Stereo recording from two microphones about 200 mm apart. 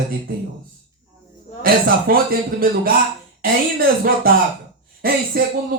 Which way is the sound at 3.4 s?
50° right (ahead or behind).